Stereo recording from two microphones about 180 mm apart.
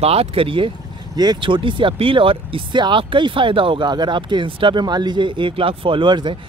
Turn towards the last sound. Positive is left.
turn(degrees=-25)  # may be behind; listen again after turning